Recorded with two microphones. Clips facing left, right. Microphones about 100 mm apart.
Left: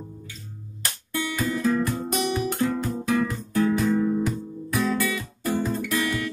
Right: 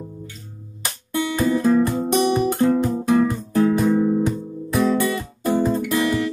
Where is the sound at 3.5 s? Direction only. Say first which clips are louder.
Right 4 dB; 45° right (ahead or behind).